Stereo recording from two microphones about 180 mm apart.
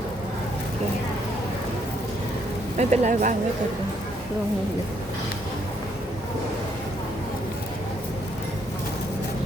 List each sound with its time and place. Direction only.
2.7 s speech: 40° right (ahead or behind)